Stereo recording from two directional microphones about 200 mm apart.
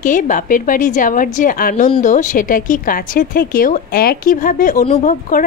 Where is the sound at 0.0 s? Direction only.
40° left (ahead or behind).